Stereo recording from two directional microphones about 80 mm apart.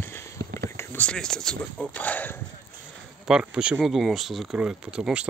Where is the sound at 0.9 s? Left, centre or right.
Centre.